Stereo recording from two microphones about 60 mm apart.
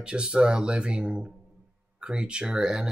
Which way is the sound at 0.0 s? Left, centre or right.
Centre.